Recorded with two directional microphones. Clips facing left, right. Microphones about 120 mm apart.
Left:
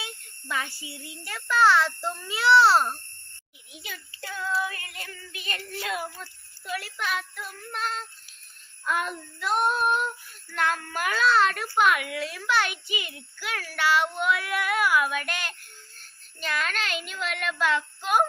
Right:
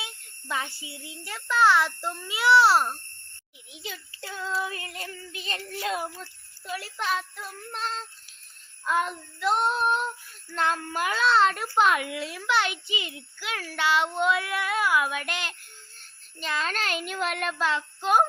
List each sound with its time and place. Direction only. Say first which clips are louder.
0.0 s a child's voice: left 1 dB; 20° right (ahead or behind)
3.8 s a child's voice: right 1 dB; 25° right (ahead or behind)
16.7 s a child's voice: right 2 dB; 45° right (ahead or behind); by 18.3 s 30° right (ahead or behind)